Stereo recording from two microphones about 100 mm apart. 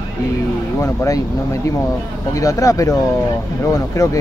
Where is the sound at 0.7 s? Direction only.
35° left (ahead or behind).